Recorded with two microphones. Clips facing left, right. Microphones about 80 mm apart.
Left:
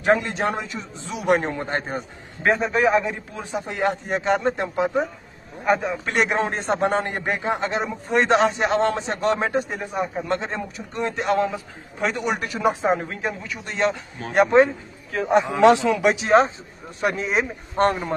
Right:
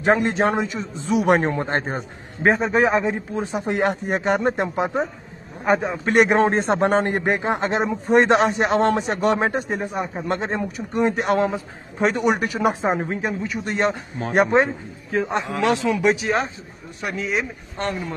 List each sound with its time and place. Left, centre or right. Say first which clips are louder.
0.0 s a man's voice: right 2 dB; right
4.1 s speech: left 1 dB; right
4.4 s a man's voice: right 1 dB; right
5.7 s speech: right 2 dB; right
6.2 s a man's voice: right 5 dB; right
8.2 s a man's voice: even; right; by 11.0 s centre
11.2 s a man's voice: right 1 dB; right
15.2 s a man's voice: left 9 dB; centre; by 18.1 s left